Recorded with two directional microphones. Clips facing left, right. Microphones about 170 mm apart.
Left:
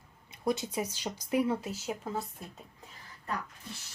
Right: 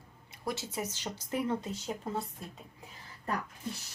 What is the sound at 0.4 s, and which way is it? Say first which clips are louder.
Speech: left 5 dB; 20° left (ahead or behind).